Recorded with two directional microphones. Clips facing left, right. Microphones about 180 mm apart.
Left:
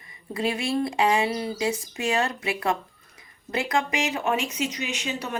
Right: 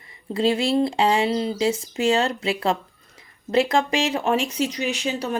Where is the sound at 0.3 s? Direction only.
25° right (ahead or behind).